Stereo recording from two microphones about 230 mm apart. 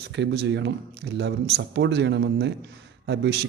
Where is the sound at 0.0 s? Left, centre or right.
Right.